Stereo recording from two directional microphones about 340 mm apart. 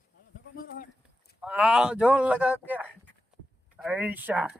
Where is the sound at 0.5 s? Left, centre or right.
Left.